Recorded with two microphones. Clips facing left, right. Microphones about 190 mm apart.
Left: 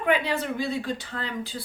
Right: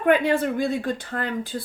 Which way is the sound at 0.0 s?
50° right (ahead or behind).